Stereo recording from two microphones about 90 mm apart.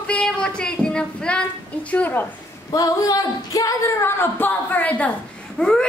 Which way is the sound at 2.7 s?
40° left (ahead or behind).